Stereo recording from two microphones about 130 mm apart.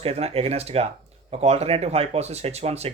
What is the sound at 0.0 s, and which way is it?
Speech, 50° right (ahead or behind).